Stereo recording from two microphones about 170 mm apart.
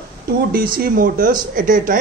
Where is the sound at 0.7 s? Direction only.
55° right (ahead or behind).